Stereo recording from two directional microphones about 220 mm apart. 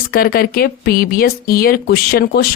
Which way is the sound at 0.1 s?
40° left (ahead or behind).